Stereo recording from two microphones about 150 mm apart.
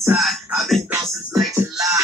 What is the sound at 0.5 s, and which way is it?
Music, centre (ahead or behind).